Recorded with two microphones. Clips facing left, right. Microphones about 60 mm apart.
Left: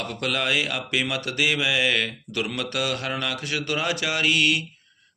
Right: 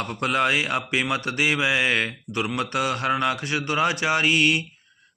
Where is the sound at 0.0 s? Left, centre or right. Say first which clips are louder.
Right 4 dB; right.